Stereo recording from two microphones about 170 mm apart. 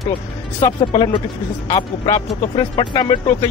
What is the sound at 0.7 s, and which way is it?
Speech, 30° left (ahead or behind).